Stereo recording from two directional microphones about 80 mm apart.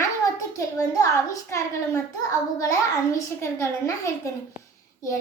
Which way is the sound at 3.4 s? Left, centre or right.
Left.